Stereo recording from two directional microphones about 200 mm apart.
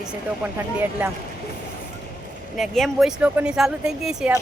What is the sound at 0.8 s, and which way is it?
Speech, 10° right (ahead or behind).